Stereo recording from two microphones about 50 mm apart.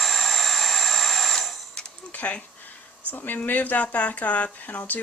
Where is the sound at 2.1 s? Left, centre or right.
Left.